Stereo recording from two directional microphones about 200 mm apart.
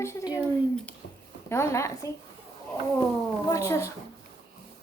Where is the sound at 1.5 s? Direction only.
15° left (ahead or behind).